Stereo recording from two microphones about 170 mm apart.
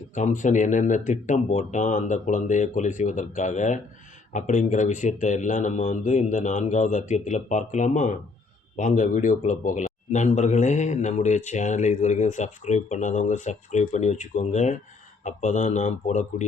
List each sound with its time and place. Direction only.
0.1 s a man's voice: 45° left (ahead or behind)